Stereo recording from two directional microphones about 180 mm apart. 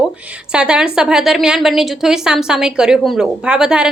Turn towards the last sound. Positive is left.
turn(degrees=-5)  # may be behind; listen again after turning